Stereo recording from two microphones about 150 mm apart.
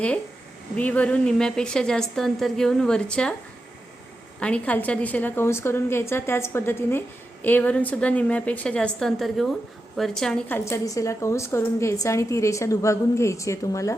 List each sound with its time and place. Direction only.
0.8 s a woman's voice: 10° left (ahead or behind)
4.4 s a woman's voice: 10° left (ahead or behind)
10.7 s a woman's voice: 20° left (ahead or behind)